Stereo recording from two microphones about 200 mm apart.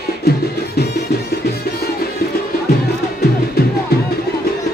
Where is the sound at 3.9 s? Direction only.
55° left (ahead or behind).